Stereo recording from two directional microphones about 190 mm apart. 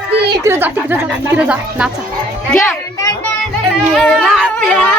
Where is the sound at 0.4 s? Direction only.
10° right (ahead or behind).